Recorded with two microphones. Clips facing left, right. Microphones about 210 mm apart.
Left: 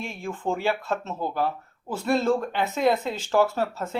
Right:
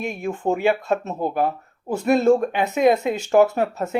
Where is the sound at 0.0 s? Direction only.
15° right (ahead or behind).